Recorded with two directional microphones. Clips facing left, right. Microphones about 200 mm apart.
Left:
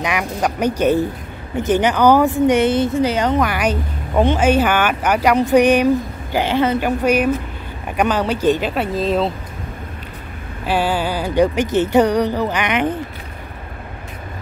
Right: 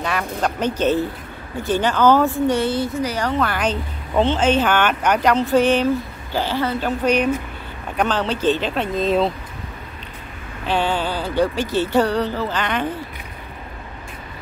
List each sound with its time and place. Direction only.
0.0 s speech: 15° left (ahead or behind)
10.6 s speech: 10° left (ahead or behind)